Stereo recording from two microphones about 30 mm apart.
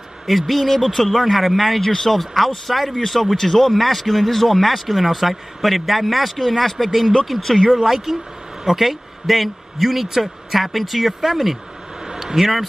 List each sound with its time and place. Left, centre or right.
0.3 s speech: centre
7.7 s speech: centre
12.1 s a sound: right
12.4 s speech: centre